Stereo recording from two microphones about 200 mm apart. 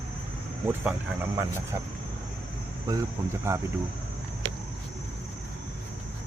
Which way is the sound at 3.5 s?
15° right (ahead or behind).